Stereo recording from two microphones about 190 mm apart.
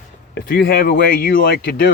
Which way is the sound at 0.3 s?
55° left (ahead or behind).